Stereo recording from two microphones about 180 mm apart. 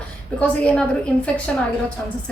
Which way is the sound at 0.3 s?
5° left (ahead or behind).